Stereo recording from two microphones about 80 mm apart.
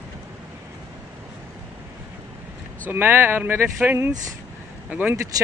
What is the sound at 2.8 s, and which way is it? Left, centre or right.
Speech, right.